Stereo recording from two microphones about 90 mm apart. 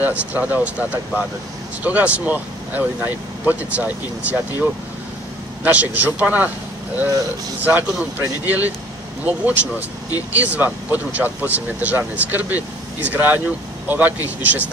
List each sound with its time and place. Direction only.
0.0 s speech: 15° right (ahead or behind)
7.6 s speech: 20° right (ahead or behind)